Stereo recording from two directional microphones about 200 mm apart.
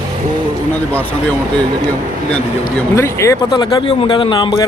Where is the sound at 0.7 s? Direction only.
10° left (ahead or behind).